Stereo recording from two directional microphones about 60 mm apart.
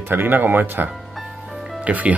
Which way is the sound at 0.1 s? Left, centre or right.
Right.